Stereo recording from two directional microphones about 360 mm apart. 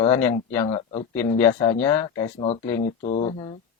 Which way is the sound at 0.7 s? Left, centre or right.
Centre.